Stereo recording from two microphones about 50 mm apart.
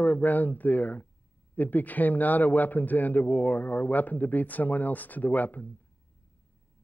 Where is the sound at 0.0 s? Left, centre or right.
Left.